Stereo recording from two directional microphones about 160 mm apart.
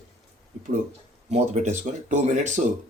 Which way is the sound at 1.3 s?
50° right (ahead or behind).